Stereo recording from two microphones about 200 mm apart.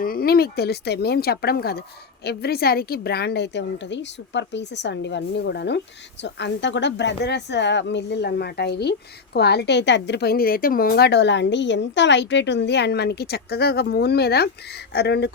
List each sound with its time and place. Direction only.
0.0 s a woman's voice: 50° left (ahead or behind)